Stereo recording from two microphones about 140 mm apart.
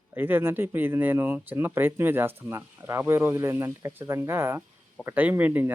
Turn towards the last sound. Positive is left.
turn(degrees=-15)  # may be behind; listen again after turning